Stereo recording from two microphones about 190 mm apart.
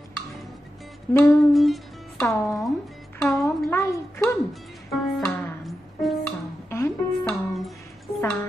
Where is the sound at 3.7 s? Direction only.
15° left (ahead or behind).